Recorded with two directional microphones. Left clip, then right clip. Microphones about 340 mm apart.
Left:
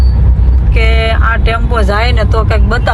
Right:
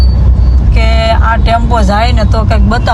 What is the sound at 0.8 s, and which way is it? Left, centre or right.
Vehicle, centre.